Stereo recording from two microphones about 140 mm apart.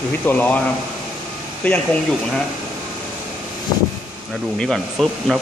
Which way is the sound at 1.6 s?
5° left (ahead or behind).